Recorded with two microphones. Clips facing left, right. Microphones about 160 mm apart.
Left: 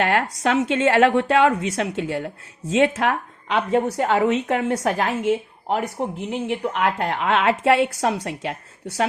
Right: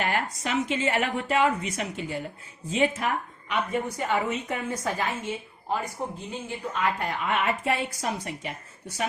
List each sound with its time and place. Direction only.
0.0 s a woman's voice: 85° left